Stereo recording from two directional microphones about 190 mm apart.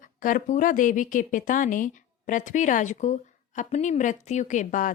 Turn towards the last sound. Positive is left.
turn(degrees=45)  # may be behind; listen again after turning